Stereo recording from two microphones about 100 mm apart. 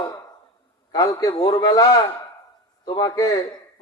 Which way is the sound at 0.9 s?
40° left (ahead or behind).